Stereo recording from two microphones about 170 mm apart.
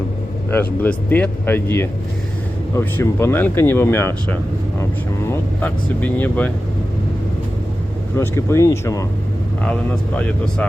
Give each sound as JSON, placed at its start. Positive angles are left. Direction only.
{"t": 0.5, "sound": "speech", "side_deg": 10}
{"t": 8.2, "sound": "speech", "side_deg": 15}
{"t": 9.6, "sound": "speech", "side_deg": 5}